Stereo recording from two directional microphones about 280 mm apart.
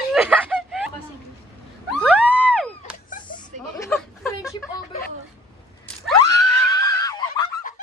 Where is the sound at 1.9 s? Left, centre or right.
Centre.